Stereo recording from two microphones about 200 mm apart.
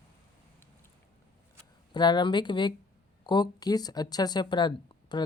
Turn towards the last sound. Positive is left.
turn(degrees=20)  # may be behind; listen again after turning